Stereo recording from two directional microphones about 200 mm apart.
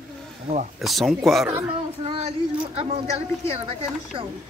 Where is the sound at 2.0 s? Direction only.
30° right (ahead or behind).